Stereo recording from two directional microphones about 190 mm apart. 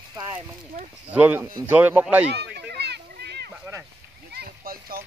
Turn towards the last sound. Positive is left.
turn(degrees=-50)  # may be behind; listen again after turning